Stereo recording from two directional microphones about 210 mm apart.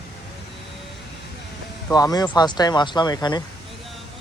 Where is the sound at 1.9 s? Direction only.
20° left (ahead or behind).